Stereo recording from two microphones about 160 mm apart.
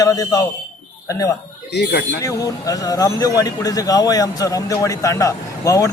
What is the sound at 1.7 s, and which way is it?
Speech, 90° left.